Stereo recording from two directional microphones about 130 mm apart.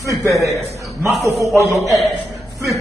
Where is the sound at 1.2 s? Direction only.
25° right (ahead or behind).